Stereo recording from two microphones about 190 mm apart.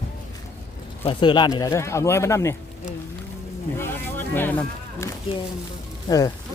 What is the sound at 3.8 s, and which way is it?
Speech, 10° left (ahead or behind).